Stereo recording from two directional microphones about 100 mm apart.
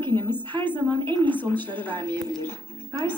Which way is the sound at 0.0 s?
20° left (ahead or behind).